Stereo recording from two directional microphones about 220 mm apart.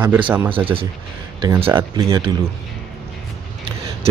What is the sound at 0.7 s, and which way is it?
Speech, 15° right (ahead or behind).